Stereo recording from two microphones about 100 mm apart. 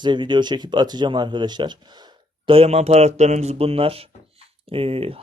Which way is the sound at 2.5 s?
80° right.